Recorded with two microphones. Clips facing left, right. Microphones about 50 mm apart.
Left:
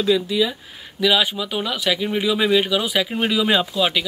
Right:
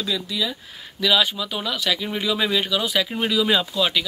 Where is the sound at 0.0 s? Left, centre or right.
Centre.